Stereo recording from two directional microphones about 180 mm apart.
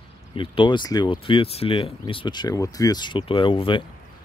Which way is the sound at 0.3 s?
30° left (ahead or behind).